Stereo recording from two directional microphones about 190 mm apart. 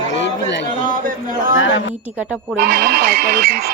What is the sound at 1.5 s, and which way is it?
Speech, 80° left.